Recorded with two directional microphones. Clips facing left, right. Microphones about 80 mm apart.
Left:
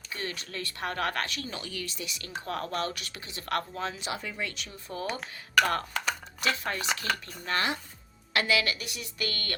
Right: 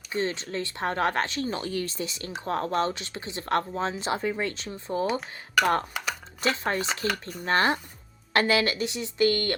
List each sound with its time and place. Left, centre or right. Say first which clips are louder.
0.1 s speech: right 8 dB; right
6.4 s speech: right 4 dB; right